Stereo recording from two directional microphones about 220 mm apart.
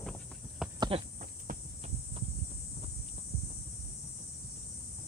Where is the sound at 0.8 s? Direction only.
25° right (ahead or behind).